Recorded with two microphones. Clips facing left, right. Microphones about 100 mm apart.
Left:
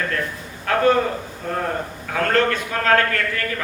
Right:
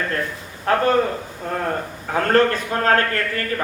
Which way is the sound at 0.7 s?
35° right (ahead or behind).